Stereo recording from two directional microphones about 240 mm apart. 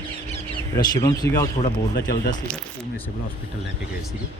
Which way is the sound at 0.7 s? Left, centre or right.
Centre.